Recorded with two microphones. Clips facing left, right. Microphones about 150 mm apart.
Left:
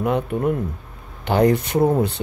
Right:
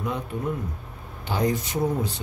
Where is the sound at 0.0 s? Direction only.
65° left (ahead or behind).